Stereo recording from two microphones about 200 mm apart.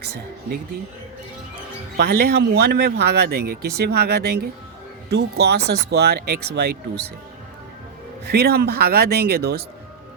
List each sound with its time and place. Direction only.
2.0 s speech: 50° right (ahead or behind)
8.2 s speech: 55° right (ahead or behind)